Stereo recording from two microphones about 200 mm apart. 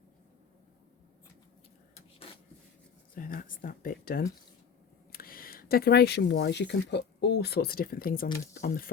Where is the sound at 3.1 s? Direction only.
45° left (ahead or behind).